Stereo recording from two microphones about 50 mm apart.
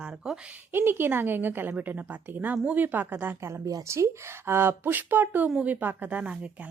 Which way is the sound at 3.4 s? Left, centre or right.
Right.